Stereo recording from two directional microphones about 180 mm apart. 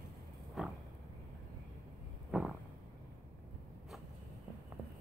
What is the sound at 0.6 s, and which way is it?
Vehicle, centre (ahead or behind).